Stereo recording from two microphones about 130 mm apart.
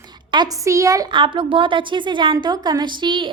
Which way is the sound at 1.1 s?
40° right (ahead or behind).